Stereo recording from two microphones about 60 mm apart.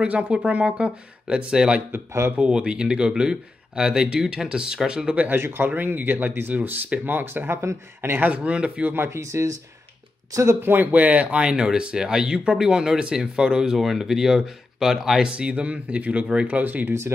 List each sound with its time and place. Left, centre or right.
0.0 s speech: centre
1.9 s speech: right
2.3 s speech: centre
5.3 s speech: right
7.6 s speech: right
8.2 s speech: centre
8.9 s speech: right
9.2 s speech: right
10.7 s speech: right; by 15.2 s centre
15.2 s speech: centre